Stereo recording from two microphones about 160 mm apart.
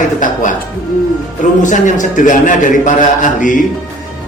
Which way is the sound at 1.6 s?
50° left (ahead or behind).